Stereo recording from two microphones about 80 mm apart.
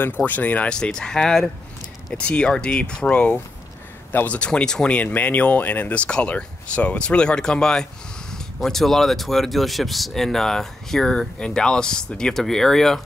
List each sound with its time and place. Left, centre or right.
0.0 s speech: left
4.1 s speech: left
4.4 s speech: centre